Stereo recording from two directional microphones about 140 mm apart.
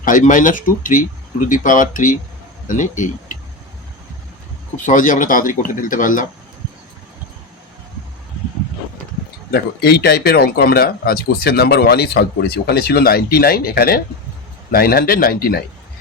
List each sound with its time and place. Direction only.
0.0 s speech: 70° left (ahead or behind)
4.9 s speech: 65° left (ahead or behind)
9.8 s speech: 90° left